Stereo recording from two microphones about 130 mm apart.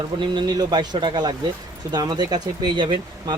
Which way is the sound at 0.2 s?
35° right (ahead or behind).